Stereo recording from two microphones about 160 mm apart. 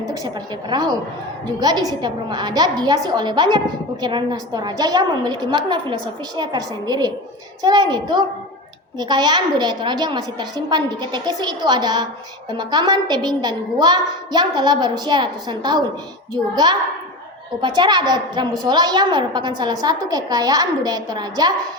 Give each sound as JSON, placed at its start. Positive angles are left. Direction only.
{"t": 0.7, "sound": "a woman's voice", "side_deg": -25}